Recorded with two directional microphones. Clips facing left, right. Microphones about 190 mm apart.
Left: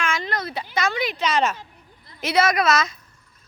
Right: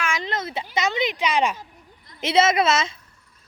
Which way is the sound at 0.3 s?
20° right (ahead or behind).